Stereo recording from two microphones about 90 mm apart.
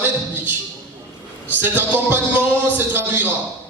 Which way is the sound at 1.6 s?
20° right (ahead or behind).